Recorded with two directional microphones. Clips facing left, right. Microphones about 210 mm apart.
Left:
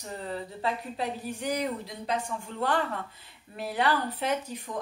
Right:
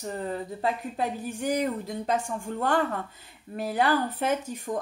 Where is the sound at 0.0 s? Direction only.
45° right (ahead or behind).